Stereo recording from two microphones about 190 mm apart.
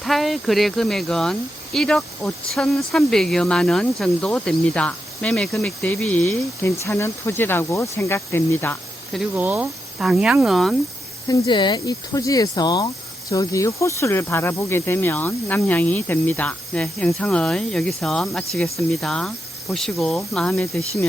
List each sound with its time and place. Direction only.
0.0 s speech: centre (ahead or behind)
9.1 s speech: 10° right (ahead or behind)
11.3 s speech: 25° left (ahead or behind); by 21.1 s 5° left (ahead or behind)